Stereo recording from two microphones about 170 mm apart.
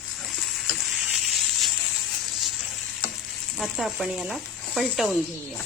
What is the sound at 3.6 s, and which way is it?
Speech, centre (ahead or behind).